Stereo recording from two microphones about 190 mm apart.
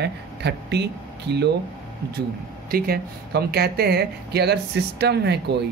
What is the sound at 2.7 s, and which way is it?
Speech, 55° right (ahead or behind).